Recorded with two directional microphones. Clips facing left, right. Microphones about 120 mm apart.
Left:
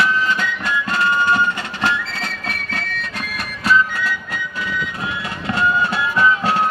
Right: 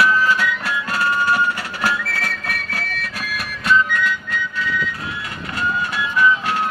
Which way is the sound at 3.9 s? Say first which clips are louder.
Right 2 dB; 35° left (ahead or behind).